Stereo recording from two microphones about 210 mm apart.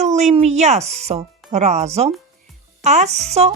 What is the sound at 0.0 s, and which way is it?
Speech, 35° right (ahead or behind).